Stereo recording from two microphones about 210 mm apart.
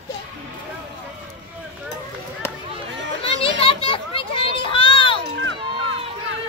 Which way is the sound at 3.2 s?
25° left (ahead or behind).